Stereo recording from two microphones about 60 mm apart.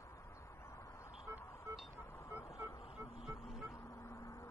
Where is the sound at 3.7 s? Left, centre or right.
Left.